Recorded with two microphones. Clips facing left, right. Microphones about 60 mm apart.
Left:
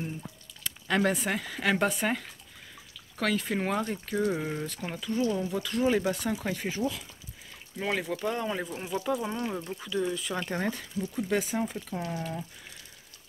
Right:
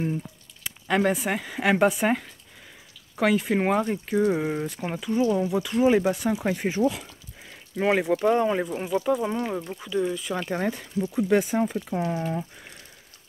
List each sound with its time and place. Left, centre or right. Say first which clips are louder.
0.7 s speech: right 4 dB; centre
7.7 s speech: right 9 dB; right
8.9 s speech: right 6 dB; centre
11.1 s speech: right 7 dB; right